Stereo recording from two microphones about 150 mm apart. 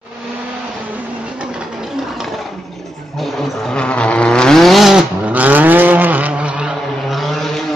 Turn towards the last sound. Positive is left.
turn(degrees=0)  # may be behind; listen again after turning